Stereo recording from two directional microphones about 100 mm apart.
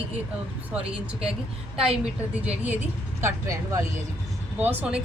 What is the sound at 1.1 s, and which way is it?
Speech, 10° right (ahead or behind).